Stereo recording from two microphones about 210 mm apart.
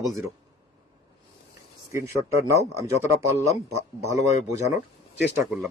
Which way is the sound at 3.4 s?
30° left (ahead or behind).